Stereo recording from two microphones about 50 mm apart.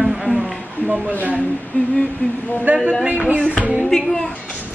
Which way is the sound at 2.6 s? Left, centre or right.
Right.